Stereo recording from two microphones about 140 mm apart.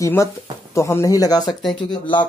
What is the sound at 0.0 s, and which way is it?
Speech, 20° left (ahead or behind).